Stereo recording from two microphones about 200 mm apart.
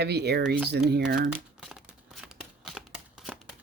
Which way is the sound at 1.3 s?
5° right (ahead or behind).